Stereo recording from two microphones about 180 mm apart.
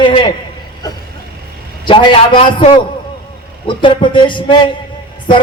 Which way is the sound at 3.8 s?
30° left (ahead or behind).